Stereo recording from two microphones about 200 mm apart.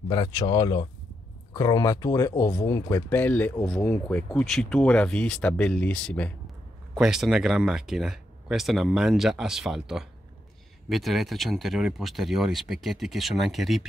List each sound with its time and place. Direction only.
0.1 s speech: 20° left (ahead or behind); by 13.8 s centre (ahead or behind)